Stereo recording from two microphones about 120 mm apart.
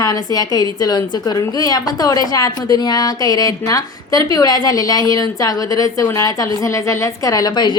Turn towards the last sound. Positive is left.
turn(degrees=35)  # may be behind; listen again after turning